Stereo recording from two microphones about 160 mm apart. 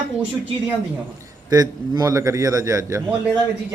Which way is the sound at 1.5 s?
25° right (ahead or behind).